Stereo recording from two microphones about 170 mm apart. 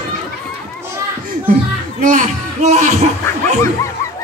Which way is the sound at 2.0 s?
50° right (ahead or behind).